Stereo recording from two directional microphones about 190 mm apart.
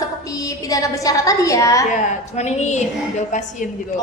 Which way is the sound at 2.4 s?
35° left (ahead or behind).